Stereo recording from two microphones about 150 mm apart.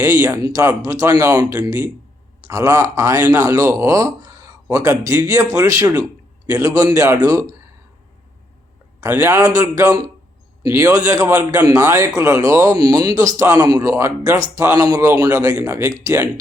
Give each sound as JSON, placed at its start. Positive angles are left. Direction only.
{"t": 0.0, "sound": "a man's voice", "side_deg": -20}
{"t": 9.0, "sound": "a man's voice", "side_deg": -20}